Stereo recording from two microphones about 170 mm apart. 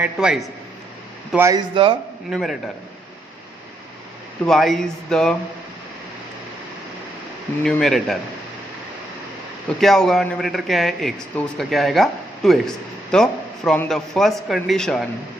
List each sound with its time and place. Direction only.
0.0 s a man's voice: 5° right (ahead or behind)
1.4 s speech: 20° right (ahead or behind)
1.7 s speech: 30° right (ahead or behind)
2.3 s a man's voice: centre (ahead or behind)
4.4 s a man's voice: centre (ahead or behind)
7.6 s a man's voice: centre (ahead or behind)
9.8 s a man's voice: centre (ahead or behind)